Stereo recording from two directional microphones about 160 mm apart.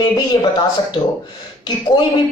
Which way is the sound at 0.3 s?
30° left (ahead or behind).